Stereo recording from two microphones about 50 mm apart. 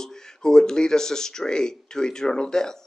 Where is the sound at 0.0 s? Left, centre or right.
Centre.